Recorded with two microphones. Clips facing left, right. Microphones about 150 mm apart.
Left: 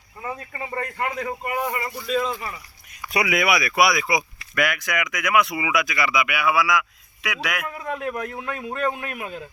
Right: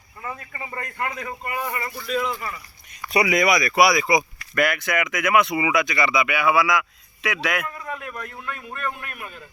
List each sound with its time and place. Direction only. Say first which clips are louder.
0.2 s a man's voice: left 2 dB; 25° left (ahead or behind)
3.0 s speech: right 3 dB; centre (ahead or behind)
8.1 s a man's voice: left 5 dB; 60° left (ahead or behind)
8.9 s a man's voice: left 5 dB; 90° left